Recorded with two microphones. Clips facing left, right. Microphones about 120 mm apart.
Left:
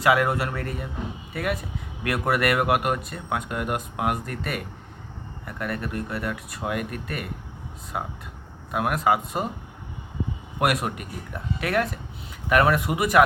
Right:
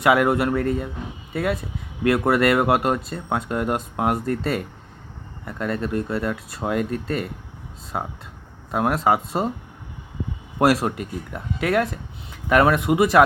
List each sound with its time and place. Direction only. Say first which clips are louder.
0.0 s speech: right 3 dB; 25° right (ahead or behind)
8.7 s speech: right 3 dB; 25° right (ahead or behind)
10.6 s speech: right 6 dB; 30° right (ahead or behind)